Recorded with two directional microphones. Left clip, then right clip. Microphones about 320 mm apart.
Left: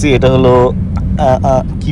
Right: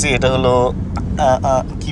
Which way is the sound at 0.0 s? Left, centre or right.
Centre.